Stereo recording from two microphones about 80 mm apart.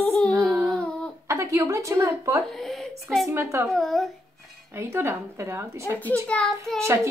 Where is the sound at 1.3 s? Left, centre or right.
Right.